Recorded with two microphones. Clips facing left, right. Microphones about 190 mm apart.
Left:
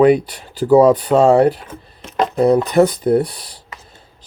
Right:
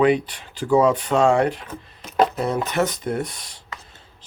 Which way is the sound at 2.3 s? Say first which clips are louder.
Left 10 dB; 35° left (ahead or behind).